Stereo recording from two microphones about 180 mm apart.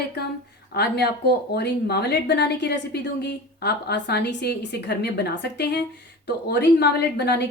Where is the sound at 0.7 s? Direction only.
65° left (ahead or behind).